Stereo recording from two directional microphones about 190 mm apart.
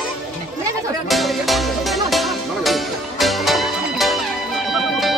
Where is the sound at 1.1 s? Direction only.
Centre (ahead or behind).